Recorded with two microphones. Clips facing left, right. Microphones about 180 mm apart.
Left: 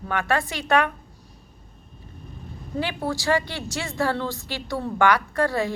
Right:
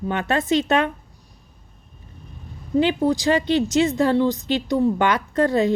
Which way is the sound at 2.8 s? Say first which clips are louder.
Right 7 dB; 20° right (ahead or behind).